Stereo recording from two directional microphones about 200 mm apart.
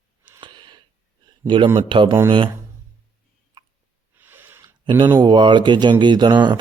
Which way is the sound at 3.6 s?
20° right (ahead or behind).